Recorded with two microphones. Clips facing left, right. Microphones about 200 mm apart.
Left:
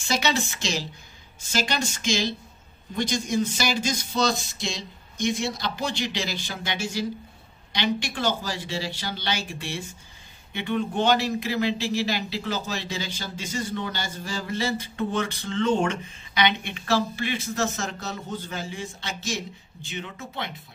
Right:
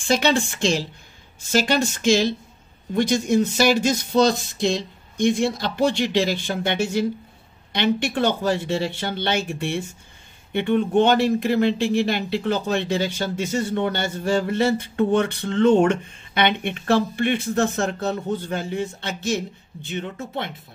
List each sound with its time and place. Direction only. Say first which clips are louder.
0.0 s a woman's voice: right 6 dB; 50° right (ahead or behind)